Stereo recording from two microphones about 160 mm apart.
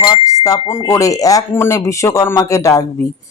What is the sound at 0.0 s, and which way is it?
A man's voice, 25° left (ahead or behind).